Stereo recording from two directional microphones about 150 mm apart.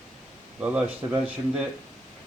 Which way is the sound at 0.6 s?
10° right (ahead or behind).